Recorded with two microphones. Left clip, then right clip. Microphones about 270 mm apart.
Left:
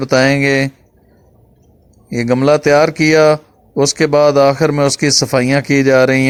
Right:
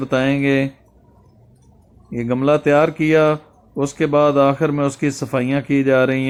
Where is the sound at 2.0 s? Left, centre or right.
Left.